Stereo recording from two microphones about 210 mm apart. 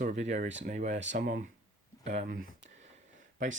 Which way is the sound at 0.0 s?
35° right (ahead or behind).